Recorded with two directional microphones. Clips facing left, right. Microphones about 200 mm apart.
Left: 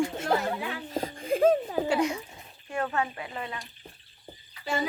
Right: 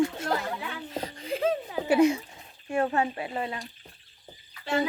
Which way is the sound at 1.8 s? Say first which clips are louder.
Right 5 dB; 25° right (ahead or behind).